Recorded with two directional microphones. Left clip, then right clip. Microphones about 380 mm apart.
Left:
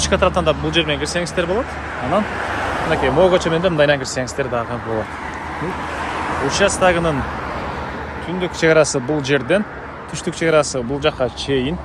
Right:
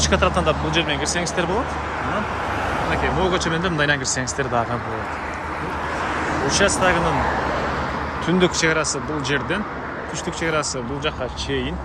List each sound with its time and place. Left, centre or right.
0.0 s speech: centre
2.1 s vehicle: centre
3.2 s speech: centre
6.5 s speech: centre
8.6 s speech: centre